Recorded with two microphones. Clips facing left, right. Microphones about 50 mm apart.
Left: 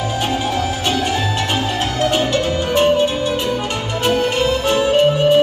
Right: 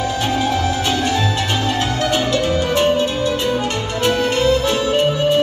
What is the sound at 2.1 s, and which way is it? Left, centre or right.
Music, centre.